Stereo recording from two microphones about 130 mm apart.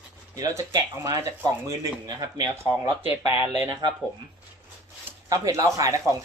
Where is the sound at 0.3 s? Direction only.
25° right (ahead or behind).